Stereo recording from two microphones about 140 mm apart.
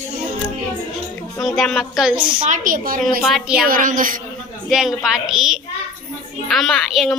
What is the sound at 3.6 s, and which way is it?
Speech, 80° right.